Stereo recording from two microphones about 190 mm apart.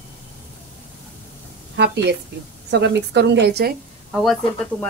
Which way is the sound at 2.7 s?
65° right (ahead or behind).